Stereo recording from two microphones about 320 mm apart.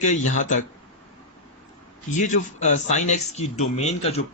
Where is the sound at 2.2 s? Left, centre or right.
Left.